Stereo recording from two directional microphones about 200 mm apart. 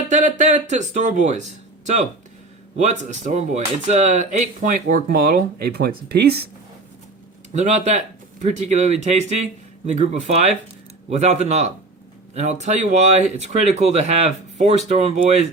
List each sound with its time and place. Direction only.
0.1 s speech: 40° right (ahead or behind); by 6.4 s 55° right (ahead or behind)
7.5 s speech: 35° right (ahead or behind)